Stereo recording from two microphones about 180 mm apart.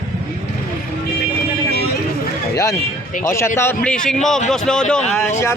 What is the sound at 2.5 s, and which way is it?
A man's voice, 20° left (ahead or behind).